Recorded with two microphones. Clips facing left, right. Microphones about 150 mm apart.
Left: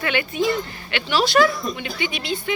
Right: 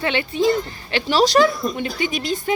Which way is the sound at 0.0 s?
30° right (ahead or behind).